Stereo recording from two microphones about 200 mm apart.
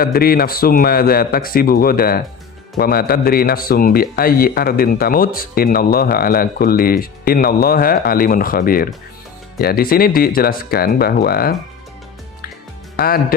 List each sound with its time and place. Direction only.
0.0 s speech: 50° left (ahead or behind)